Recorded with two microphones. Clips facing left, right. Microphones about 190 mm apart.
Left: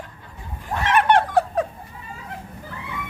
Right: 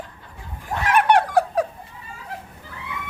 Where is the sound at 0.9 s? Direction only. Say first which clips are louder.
Even; 10° right (ahead or behind).